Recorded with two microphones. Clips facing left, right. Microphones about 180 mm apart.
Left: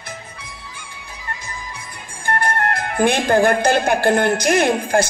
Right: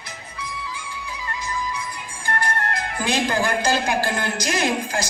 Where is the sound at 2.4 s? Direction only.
55° left (ahead or behind).